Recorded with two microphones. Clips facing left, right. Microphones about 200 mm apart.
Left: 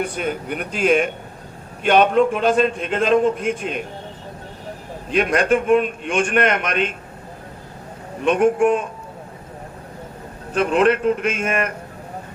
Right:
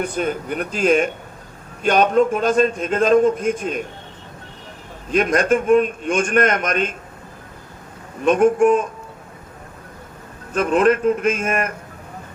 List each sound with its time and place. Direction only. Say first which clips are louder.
0.0 s a man's voice: right 1 dB; 40° right (ahead or behind)
5.1 s a man's voice: right 1 dB; 45° right (ahead or behind)
8.2 s a man's voice: right 2 dB; 40° right (ahead or behind)
10.5 s a man's voice: right 1 dB; 45° right (ahead or behind)